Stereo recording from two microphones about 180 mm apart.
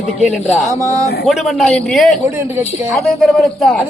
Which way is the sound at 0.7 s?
15° right (ahead or behind).